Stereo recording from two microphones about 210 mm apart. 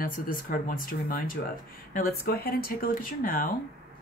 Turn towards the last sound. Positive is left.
turn(degrees=40)  # may be behind; listen again after turning